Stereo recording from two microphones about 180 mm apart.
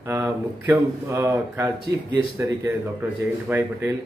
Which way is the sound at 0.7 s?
15° right (ahead or behind).